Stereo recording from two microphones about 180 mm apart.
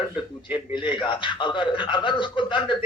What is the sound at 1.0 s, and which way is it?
A man's voice, 25° left (ahead or behind).